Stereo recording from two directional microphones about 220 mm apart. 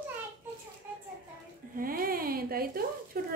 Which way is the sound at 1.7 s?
40° right (ahead or behind).